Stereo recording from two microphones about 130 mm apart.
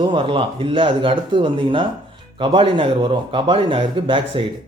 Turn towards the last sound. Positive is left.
turn(degrees=-40)  # may be behind; listen again after turning